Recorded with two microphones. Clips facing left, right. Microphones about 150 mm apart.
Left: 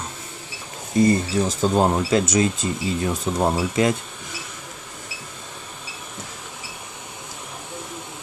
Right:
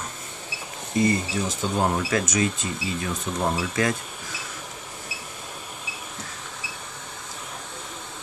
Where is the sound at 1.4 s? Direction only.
35° left (ahead or behind).